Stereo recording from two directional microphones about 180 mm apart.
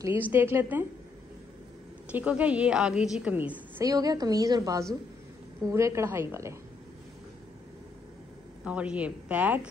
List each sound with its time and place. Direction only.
0.3 s a woman's voice: 10° right (ahead or behind)
2.1 s a woman's voice: 10° right (ahead or behind)
8.6 s a woman's voice: 5° right (ahead or behind)